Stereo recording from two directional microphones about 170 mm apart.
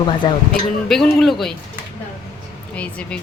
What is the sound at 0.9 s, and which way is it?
Speech, centre (ahead or behind).